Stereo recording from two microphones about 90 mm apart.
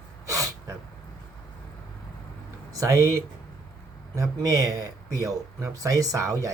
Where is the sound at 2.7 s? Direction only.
35° right (ahead or behind).